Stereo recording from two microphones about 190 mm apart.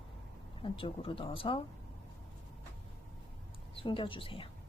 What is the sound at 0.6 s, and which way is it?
Speech, 30° left (ahead or behind).